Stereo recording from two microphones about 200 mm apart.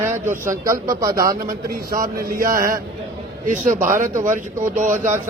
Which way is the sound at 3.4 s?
40° right (ahead or behind).